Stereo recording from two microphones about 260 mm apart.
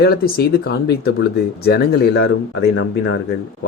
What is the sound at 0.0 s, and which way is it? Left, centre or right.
A man's voice, left.